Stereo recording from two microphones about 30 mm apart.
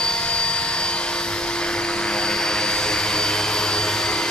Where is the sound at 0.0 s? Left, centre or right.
Left.